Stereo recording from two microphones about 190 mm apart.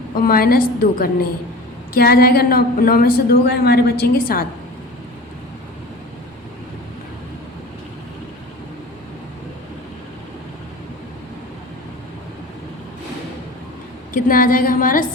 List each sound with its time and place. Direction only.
0.2 s a woman's voice: 50° left (ahead or behind)
14.1 s a woman's voice: 45° left (ahead or behind)